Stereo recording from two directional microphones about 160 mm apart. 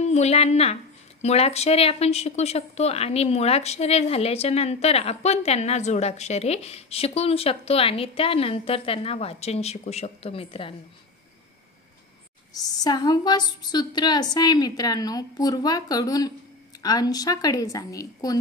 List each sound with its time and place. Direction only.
0.0 s a woman's voice: 45° left (ahead or behind)
12.5 s a woman's voice: 25° left (ahead or behind)